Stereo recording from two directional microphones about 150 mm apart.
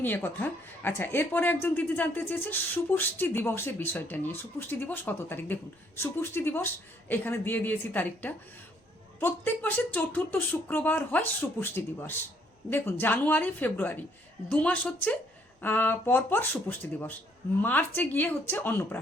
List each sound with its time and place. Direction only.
0.0 s speech: 15° left (ahead or behind)